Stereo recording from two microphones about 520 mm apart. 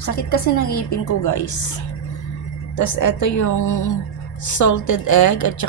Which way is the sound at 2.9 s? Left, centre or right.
Left.